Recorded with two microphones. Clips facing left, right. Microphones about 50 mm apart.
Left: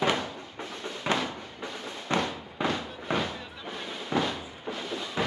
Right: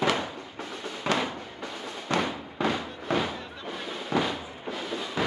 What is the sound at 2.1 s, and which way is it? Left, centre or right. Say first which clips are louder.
Fireworks: right 1 dB; left.